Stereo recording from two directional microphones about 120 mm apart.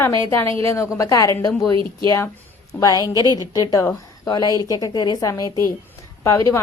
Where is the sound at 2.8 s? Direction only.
30° left (ahead or behind).